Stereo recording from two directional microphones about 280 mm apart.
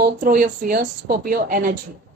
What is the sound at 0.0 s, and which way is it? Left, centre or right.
A woman's voice, right.